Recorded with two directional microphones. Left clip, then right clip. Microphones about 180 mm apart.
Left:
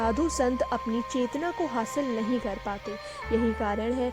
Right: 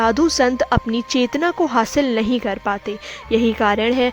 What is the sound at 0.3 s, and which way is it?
A woman's voice, 25° right (ahead or behind).